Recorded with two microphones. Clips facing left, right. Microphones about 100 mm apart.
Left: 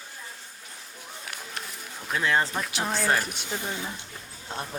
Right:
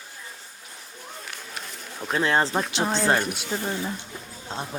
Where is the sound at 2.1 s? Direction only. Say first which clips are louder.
Right 3 dB; 35° right (ahead or behind).